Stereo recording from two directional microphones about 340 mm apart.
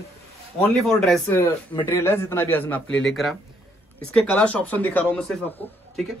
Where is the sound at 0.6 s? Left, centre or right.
Centre.